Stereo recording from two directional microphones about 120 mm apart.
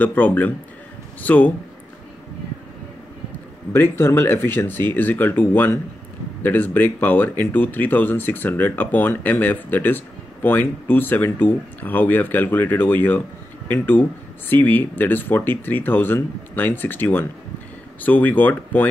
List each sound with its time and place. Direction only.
0.0 s speech: 15° left (ahead or behind)
3.7 s speech: 20° left (ahead or behind)